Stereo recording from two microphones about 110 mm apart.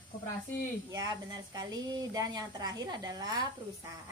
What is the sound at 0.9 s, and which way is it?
A woman's voice, 35° right (ahead or behind).